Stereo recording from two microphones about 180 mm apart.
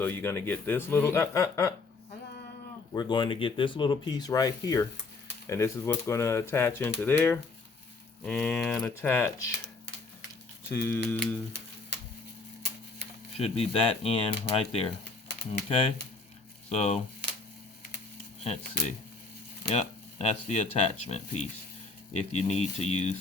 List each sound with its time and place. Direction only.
0.0 s speech: 10° left (ahead or behind)
2.9 s speech: 25° left (ahead or behind)
10.7 s speech: 10° left (ahead or behind)
13.3 s speech: 35° left (ahead or behind)
16.6 s speech: 40° left (ahead or behind)
18.4 s speech: 40° left (ahead or behind)